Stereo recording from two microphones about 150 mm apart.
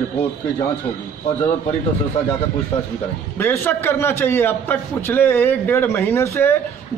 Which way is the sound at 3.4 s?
15° left (ahead or behind).